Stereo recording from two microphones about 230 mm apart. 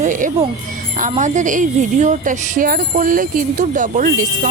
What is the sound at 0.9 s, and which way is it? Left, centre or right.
Speech, right.